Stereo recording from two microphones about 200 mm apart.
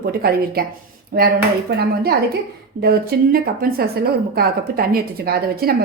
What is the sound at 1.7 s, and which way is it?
A woman's voice, 50° right (ahead or behind).